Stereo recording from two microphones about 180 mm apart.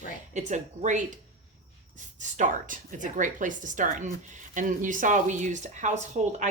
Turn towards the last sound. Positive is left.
turn(degrees=-40)  # may be behind; listen again after turning